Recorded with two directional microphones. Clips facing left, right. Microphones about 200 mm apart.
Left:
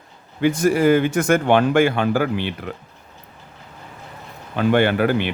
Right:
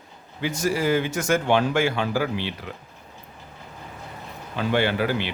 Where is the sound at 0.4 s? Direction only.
55° left (ahead or behind).